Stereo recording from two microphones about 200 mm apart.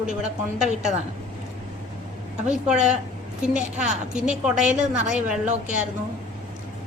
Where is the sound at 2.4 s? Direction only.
5° right (ahead or behind).